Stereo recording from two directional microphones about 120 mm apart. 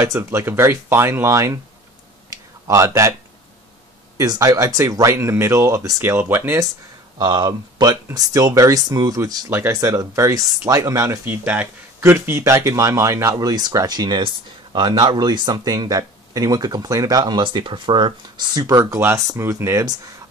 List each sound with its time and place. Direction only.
0.0 s speech: 25° right (ahead or behind)
2.2 s a sound: 25° right (ahead or behind)
4.2 s speech: 30° right (ahead or behind)
7.2 s speech: 35° right (ahead or behind)
18.6 s speech: 30° right (ahead or behind)